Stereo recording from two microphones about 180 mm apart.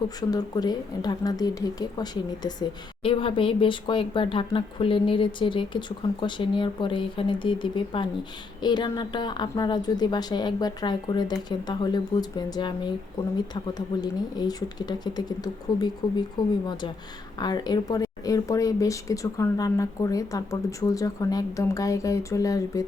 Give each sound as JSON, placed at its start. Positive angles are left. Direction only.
{"t": 0.2, "sound": "speech", "side_deg": 20}
{"t": 17.4, "sound": "speech", "side_deg": 20}